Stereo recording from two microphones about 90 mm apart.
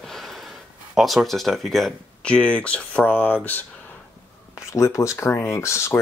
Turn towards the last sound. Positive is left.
turn(degrees=30)  # may be behind; listen again after turning